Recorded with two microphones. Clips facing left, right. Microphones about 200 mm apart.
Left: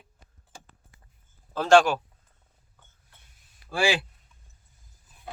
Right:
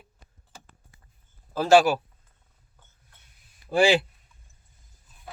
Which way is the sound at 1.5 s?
5° right (ahead or behind).